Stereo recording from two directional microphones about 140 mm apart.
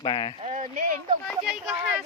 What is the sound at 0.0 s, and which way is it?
Speech, 35° left (ahead or behind).